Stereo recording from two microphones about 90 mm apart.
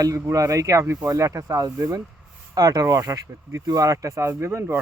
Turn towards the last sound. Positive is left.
turn(degrees=-30)  # may be behind; listen again after turning